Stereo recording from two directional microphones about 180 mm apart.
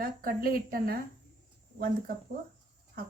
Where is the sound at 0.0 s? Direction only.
50° right (ahead or behind).